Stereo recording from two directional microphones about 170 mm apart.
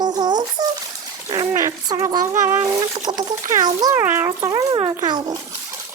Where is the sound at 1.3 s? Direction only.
20° right (ahead or behind).